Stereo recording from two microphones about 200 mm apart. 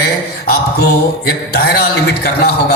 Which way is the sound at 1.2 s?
50° left (ahead or behind).